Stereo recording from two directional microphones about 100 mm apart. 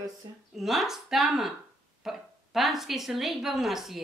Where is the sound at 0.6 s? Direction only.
5° right (ahead or behind).